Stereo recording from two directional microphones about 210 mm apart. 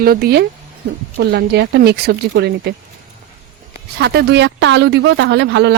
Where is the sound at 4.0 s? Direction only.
50° right (ahead or behind).